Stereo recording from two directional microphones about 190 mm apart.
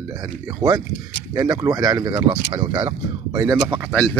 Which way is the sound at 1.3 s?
20° right (ahead or behind).